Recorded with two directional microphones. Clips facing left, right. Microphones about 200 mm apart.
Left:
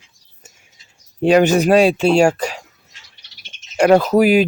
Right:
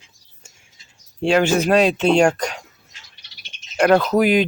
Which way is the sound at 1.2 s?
15° left (ahead or behind).